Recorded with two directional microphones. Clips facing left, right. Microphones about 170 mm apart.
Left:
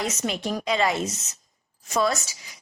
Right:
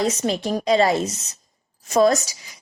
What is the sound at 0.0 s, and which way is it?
A woman's voice, 35° right (ahead or behind).